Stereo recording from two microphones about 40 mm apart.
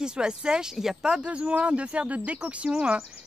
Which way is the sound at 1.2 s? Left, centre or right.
Right.